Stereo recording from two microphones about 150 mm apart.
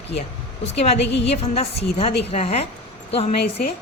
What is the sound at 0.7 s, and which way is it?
A woman's voice, 45° left (ahead or behind).